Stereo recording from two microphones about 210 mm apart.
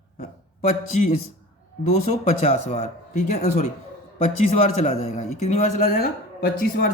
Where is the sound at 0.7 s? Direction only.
40° left (ahead or behind).